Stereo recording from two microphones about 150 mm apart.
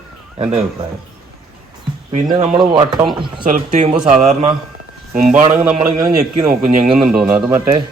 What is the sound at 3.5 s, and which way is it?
A man's voice, 60° right (ahead or behind).